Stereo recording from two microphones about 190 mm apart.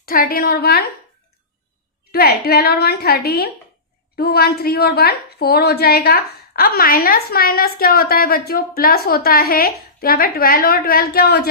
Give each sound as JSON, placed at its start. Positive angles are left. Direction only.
{"t": 0.0, "sound": "a woman's voice", "side_deg": 50}
{"t": 2.1, "sound": "a woman's voice", "side_deg": 55}